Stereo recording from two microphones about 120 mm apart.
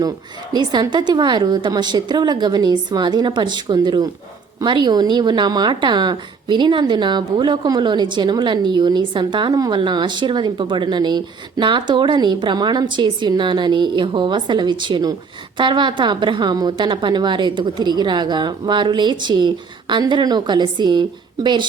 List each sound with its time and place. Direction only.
0.5 s speech: 35° right (ahead or behind)